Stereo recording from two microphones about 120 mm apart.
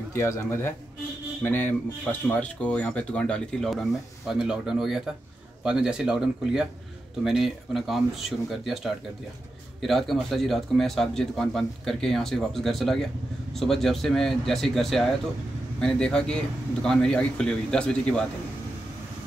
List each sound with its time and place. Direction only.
0.1 s a man's voice: 20° left (ahead or behind)